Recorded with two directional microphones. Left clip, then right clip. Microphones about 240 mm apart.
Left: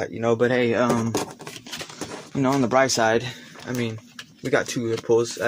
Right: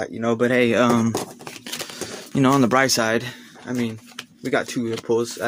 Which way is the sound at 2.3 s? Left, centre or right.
Right.